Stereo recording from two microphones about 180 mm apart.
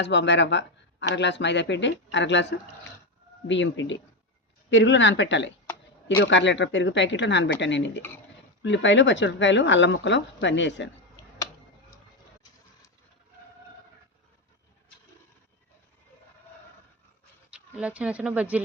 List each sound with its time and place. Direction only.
0.0 s speech: 75° left (ahead or behind)
3.4 s speech: 90° left
17.5 s speech: 5° right (ahead or behind)